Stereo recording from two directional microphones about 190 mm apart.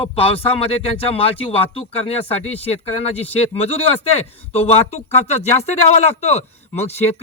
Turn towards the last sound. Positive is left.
turn(degrees=35)  # may be behind; listen again after turning